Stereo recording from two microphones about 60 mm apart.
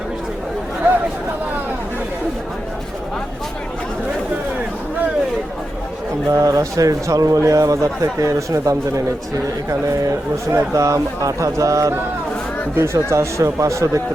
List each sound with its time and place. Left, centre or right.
0.8 s chatter: right
6.3 s speech: right
12.7 s speech: right